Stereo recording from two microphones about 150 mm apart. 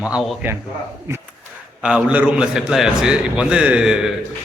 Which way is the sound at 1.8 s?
5° right (ahead or behind).